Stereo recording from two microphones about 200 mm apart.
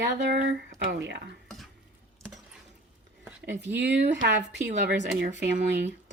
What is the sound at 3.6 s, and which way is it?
Speech, 60° right (ahead or behind).